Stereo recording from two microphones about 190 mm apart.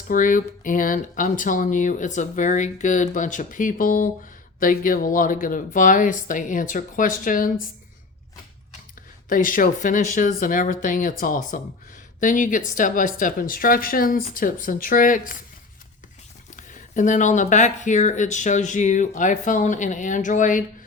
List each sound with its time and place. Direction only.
0.1 s speech: 45° left (ahead or behind)
9.3 s speech: 45° left (ahead or behind)
16.6 s speech: 40° left (ahead or behind)